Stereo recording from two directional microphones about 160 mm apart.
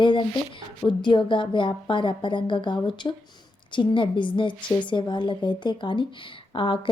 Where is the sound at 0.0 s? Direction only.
30° left (ahead or behind).